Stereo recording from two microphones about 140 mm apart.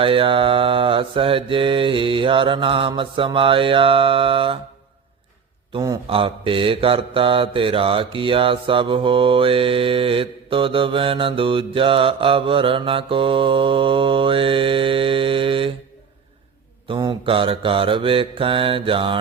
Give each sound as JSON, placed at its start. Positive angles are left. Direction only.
{"t": 0.0, "sound": "mantra", "side_deg": -40}
{"t": 5.7, "sound": "mantra", "side_deg": -35}
{"t": 16.9, "sound": "mantra", "side_deg": -35}